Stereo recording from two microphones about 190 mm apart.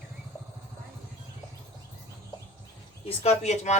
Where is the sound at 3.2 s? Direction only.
35° left (ahead or behind).